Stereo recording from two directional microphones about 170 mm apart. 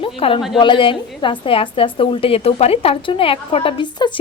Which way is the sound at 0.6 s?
30° left (ahead or behind).